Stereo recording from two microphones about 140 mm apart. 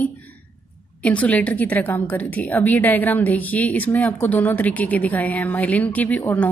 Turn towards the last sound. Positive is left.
turn(degrees=10)  # may be behind; listen again after turning